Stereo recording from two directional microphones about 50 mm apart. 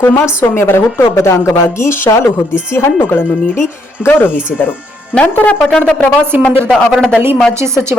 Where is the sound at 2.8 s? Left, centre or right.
Left.